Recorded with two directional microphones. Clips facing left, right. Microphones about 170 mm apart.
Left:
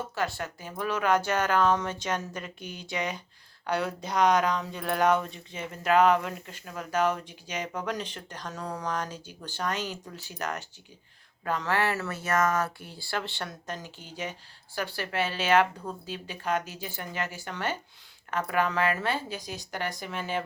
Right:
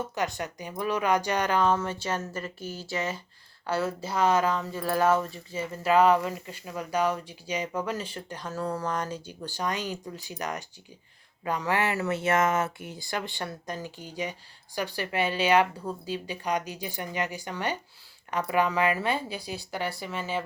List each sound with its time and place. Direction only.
0.1 s speech: 20° right (ahead or behind)
9.0 s speech: 10° left (ahead or behind)
9.4 s speech: 10° right (ahead or behind)